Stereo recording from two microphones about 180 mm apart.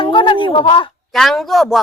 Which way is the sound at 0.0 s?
25° left (ahead or behind).